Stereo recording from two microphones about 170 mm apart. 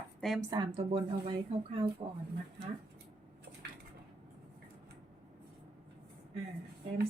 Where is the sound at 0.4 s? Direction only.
25° right (ahead or behind).